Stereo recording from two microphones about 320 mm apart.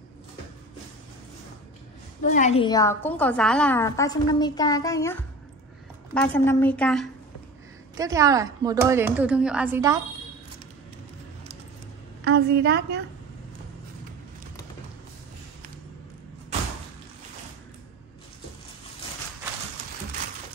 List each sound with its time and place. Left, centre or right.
2.2 s a woman's voice: left; by 7.1 s centre
7.9 s speech: centre
12.3 s a woman's voice: right